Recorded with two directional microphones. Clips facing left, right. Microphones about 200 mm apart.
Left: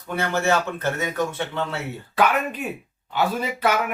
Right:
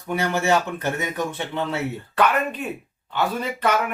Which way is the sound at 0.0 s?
15° right (ahead or behind).